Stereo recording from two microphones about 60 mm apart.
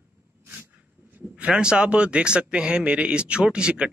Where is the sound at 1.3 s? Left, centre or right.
Centre.